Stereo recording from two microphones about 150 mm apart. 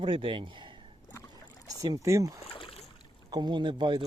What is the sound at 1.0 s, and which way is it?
Boat, 20° left (ahead or behind).